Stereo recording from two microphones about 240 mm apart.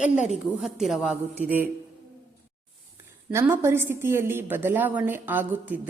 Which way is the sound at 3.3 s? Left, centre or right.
Centre.